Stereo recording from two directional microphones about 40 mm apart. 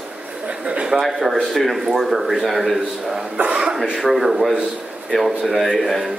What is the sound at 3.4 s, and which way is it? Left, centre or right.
Speech, right.